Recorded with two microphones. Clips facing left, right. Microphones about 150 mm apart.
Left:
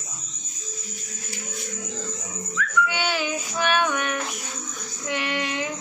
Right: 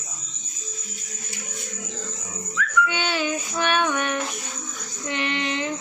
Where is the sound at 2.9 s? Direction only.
10° left (ahead or behind).